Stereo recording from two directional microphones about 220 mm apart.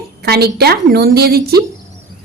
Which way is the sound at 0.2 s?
45° right (ahead or behind).